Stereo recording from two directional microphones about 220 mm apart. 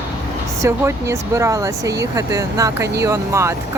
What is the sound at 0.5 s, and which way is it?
Speech, 15° right (ahead or behind).